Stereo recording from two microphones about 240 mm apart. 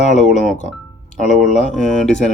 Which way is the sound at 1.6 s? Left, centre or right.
Centre.